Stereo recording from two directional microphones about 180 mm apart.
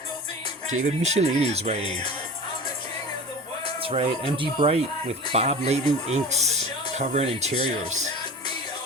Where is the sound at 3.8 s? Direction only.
30° right (ahead or behind).